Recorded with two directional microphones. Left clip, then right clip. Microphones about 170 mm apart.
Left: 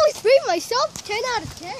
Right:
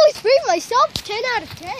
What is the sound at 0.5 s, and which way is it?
Speech, 40° right (ahead or behind).